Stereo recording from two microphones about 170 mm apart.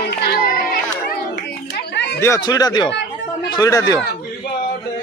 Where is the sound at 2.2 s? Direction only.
20° left (ahead or behind).